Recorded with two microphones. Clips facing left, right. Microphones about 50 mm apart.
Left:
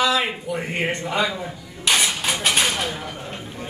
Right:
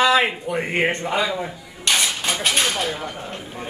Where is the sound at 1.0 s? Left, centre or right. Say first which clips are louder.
Right 1 dB; centre.